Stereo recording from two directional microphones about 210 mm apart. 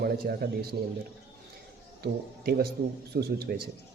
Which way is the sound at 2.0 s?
50° right (ahead or behind).